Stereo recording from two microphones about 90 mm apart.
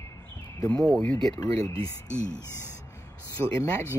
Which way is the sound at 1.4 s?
45° left (ahead or behind).